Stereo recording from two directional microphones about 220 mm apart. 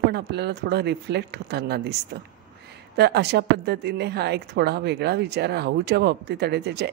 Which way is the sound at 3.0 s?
50° right (ahead or behind).